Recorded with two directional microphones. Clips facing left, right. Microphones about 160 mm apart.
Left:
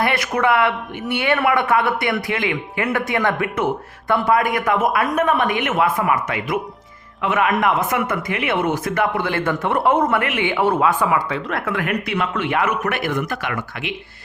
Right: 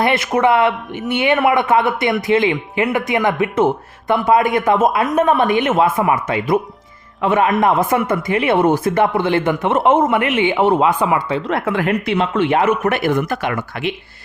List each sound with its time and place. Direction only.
0.0 s speech: 25° right (ahead or behind)